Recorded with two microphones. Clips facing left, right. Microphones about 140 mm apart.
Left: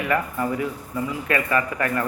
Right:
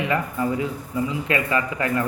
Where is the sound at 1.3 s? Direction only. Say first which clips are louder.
Even; 20° right (ahead or behind).